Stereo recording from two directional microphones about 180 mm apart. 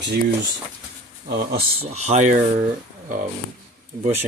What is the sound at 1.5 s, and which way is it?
Speech, 35° right (ahead or behind).